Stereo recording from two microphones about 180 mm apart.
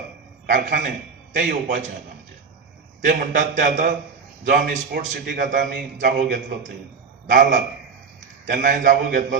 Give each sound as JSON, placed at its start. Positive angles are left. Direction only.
{"t": 0.5, "sound": "a man's voice", "side_deg": -45}
{"t": 3.3, "sound": "a man's voice", "side_deg": -45}